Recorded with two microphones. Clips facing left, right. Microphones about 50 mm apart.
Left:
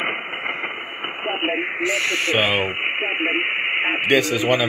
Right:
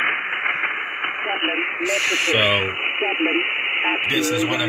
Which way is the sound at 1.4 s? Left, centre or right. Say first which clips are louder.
Left 1 dB; centre.